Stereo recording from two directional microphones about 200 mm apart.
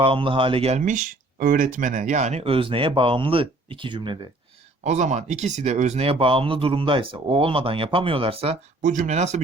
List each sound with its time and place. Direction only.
0.0 s speech: 25° right (ahead or behind)
4.8 s speech: 35° right (ahead or behind)